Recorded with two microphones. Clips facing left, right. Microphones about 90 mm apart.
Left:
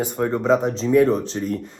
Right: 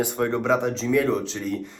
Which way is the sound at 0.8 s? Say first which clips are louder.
Left 5 dB; 25° left (ahead or behind).